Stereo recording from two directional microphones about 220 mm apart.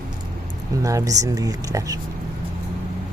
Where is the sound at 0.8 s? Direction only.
15° right (ahead or behind).